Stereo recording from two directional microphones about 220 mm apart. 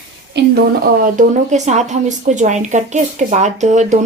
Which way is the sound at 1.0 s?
35° right (ahead or behind).